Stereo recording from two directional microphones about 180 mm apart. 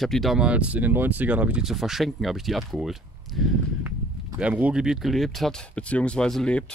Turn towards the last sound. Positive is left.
turn(degrees=5)  # may be behind; listen again after turning